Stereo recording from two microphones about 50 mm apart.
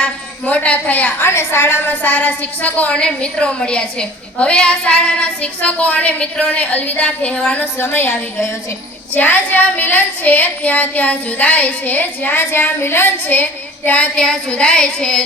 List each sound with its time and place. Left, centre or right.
0.0 s a sound: left
1.2 s speech: left
2.9 s a woman's voice: centre
7.6 s a woman's voice: left
9.1 s speech: left
13.2 s child singing: left
14.5 s a woman's voice: left